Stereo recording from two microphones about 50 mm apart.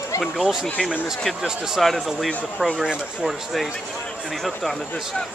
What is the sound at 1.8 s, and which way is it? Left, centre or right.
Speech, centre.